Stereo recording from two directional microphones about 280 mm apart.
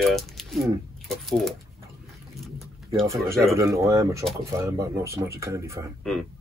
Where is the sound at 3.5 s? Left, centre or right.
Centre.